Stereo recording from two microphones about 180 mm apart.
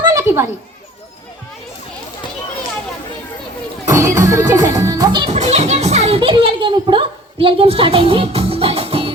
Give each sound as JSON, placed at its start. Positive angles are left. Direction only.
{"t": 0.0, "sound": "children playing", "side_deg": -15}
{"t": 3.8, "sound": "speech", "side_deg": -15}
{"t": 5.3, "sound": "a child's voice", "side_deg": -35}